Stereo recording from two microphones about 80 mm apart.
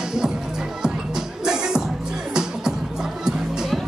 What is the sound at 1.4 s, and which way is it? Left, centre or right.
Music, centre.